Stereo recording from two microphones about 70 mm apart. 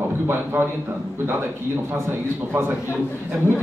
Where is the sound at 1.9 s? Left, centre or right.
Right.